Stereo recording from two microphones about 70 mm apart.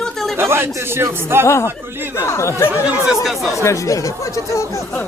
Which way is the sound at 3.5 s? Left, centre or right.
Left.